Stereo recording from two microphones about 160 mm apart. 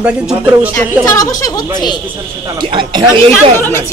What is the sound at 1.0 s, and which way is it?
Speech, 20° left (ahead or behind).